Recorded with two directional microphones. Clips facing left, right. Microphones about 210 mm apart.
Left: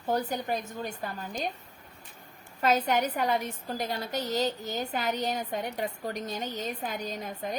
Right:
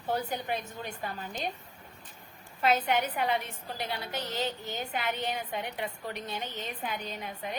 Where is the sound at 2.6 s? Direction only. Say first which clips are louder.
Left 2 dB; 40° left (ahead or behind).